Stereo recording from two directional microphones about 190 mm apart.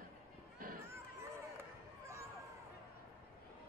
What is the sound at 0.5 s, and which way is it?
Run, 50° right (ahead or behind).